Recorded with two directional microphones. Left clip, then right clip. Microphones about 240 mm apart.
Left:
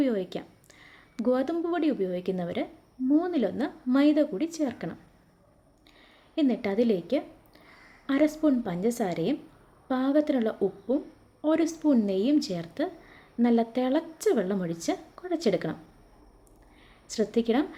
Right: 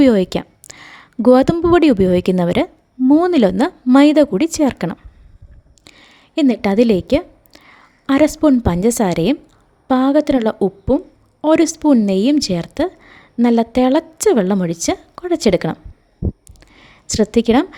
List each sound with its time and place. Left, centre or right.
0.0 s a woman's voice: right